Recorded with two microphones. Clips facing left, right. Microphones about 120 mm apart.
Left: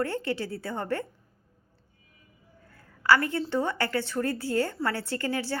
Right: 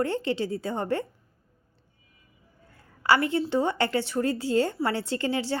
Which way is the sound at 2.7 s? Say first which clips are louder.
Even; 20° right (ahead or behind).